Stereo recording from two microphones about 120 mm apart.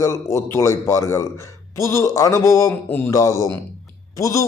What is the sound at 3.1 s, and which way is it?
A man's voice, 30° left (ahead or behind).